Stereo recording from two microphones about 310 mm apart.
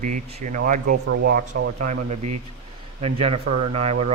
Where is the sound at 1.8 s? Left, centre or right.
Right.